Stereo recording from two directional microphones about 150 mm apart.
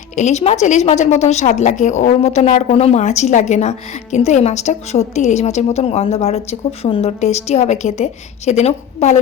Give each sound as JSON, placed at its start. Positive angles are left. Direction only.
{"t": 0.2, "sound": "a woman's voice", "side_deg": 50}